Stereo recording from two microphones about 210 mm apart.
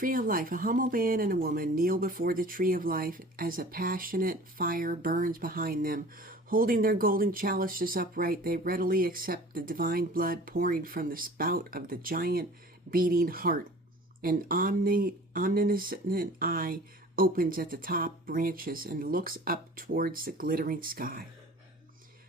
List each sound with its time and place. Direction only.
0.0 s speech: 40° right (ahead or behind)